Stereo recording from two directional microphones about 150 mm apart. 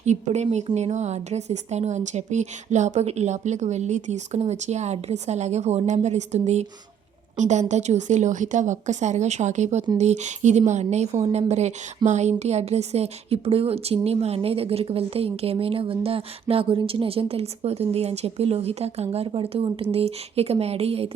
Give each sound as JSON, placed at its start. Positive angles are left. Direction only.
{"t": 0.0, "sound": "a woman's voice", "side_deg": -50}